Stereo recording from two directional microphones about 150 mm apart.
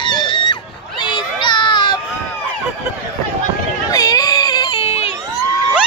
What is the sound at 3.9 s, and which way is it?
Baby cry, 25° left (ahead or behind).